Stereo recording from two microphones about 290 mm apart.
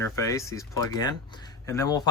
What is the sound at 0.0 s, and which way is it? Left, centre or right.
Speech, centre.